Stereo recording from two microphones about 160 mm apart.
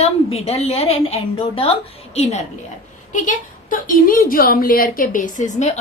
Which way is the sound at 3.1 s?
55° left (ahead or behind).